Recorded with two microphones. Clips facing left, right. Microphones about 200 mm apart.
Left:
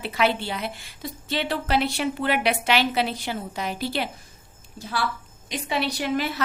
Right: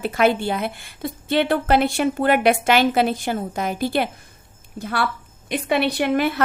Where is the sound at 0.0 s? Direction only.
50° right (ahead or behind).